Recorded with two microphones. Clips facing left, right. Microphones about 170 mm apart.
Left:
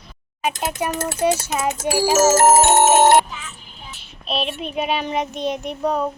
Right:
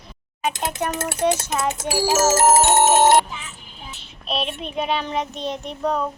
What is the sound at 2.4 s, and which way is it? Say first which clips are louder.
Music: left 2 dB; 55° left (ahead or behind).